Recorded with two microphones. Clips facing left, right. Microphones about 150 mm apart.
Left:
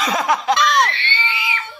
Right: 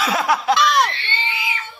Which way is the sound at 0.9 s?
70° left (ahead or behind).